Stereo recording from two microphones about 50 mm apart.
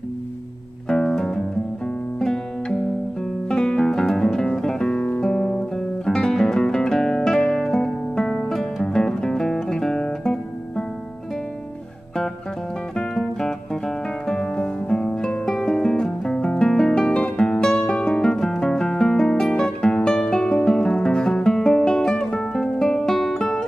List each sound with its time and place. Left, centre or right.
0.8 s music: centre
3.4 s music: centre
4.0 s guitar: centre
6.0 s music: centre
12.9 s music: centre